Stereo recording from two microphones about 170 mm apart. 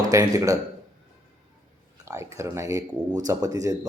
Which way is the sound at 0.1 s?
20° right (ahead or behind).